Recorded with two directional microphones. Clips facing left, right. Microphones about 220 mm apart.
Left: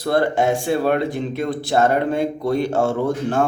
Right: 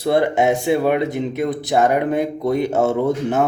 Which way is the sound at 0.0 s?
20° right (ahead or behind).